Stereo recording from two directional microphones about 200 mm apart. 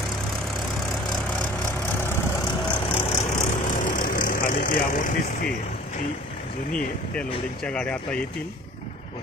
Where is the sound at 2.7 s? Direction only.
30° left (ahead or behind).